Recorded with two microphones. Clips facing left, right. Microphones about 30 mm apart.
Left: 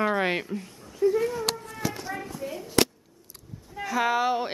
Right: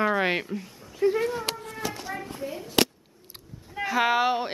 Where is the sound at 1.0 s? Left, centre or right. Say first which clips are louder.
Even; right.